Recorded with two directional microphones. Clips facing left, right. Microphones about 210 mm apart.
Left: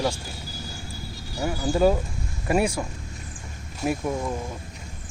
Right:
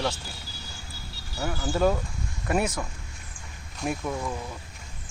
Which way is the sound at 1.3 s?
10° left (ahead or behind).